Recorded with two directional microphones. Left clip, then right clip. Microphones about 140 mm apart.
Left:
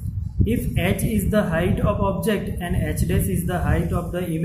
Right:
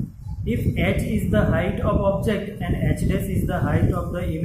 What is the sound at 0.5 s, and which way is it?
A man's voice, 45° left (ahead or behind).